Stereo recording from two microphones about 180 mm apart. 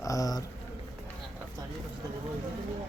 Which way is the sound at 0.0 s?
20° left (ahead or behind).